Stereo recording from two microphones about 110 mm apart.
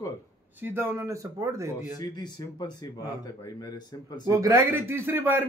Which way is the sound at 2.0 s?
40° left (ahead or behind).